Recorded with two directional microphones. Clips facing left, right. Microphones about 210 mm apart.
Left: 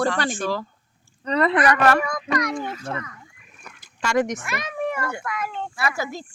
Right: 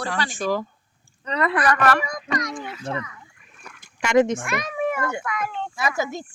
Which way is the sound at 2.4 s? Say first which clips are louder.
Left 4 dB; 45° left (ahead or behind).